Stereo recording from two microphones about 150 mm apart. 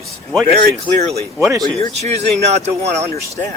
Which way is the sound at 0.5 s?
45° right (ahead or behind).